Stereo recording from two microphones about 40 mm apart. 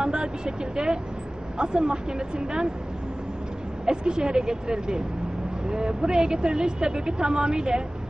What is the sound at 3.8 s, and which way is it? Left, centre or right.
A woman's voice, centre.